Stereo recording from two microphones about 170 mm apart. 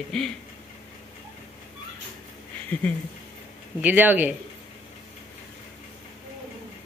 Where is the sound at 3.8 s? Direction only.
10° right (ahead or behind).